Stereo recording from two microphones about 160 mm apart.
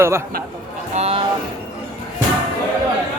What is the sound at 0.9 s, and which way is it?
Speech, 40° right (ahead or behind).